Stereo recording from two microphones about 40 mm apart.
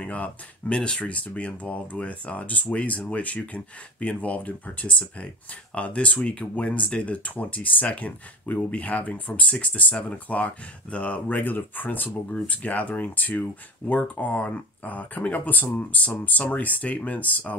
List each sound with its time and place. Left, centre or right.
0.0 s speech: left
12.3 s speech: left